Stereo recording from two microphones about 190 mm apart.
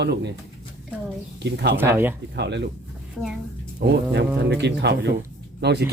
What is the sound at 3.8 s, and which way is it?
Speech, 55° right (ahead or behind).